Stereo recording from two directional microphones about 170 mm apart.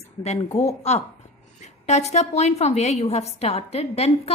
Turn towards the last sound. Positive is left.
turn(degrees=35)  # may be behind; listen again after turning